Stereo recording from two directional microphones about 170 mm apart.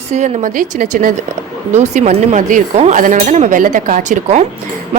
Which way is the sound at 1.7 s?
45° right (ahead or behind).